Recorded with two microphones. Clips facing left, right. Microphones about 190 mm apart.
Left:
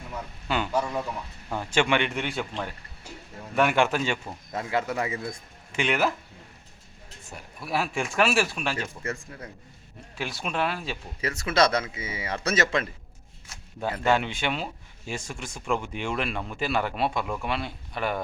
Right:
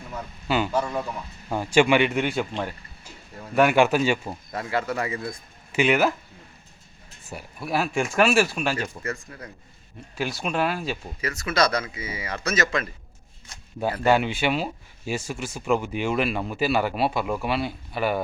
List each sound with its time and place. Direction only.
0.1 s speech: 5° right (ahead or behind)
4.5 s speech: 20° left (ahead or behind)
5.7 s speech: 5° right (ahead or behind)
7.3 s speech: 5° right (ahead or behind)
9.0 s speech: 25° left (ahead or behind)
10.2 s speech: centre (ahead or behind)
11.2 s speech: 30° left (ahead or behind)
13.5 s a sound: 5° left (ahead or behind)
14.0 s speech: 5° right (ahead or behind)